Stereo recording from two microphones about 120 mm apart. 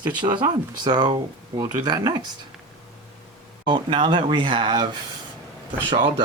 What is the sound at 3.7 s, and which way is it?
Speech, 45° right (ahead or behind).